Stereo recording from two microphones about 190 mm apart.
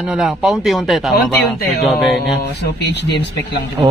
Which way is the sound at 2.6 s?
65° left (ahead or behind).